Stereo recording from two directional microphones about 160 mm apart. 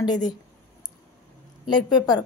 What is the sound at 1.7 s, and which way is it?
Speech, 25° left (ahead or behind).